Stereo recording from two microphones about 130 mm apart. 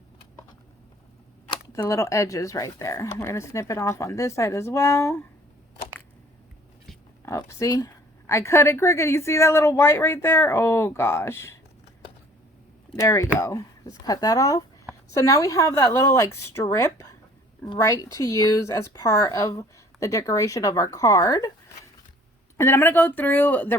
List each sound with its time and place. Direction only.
1.5 s a woman's voice: 30° left (ahead or behind)
7.3 s a woman's voice: 25° left (ahead or behind)
13.0 s a woman's voice: 25° left (ahead or behind)
22.5 s speech: 20° left (ahead or behind)